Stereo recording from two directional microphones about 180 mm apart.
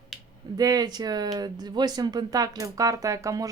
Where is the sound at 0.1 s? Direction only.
Centre (ahead or behind).